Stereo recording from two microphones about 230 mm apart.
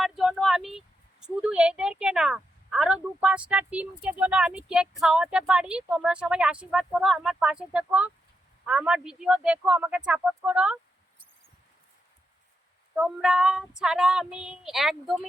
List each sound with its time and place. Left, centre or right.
0.0 s speech: centre
13.0 s speech: centre